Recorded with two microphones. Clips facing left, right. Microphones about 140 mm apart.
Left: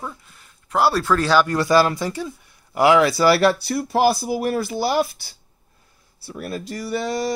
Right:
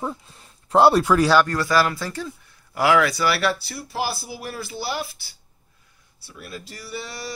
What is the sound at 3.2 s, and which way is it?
Speech, 40° left (ahead or behind).